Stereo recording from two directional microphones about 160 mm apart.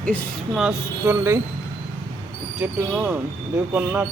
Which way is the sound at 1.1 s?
15° right (ahead or behind).